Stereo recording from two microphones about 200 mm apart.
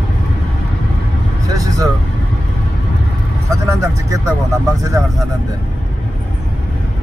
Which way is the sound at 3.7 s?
15° right (ahead or behind).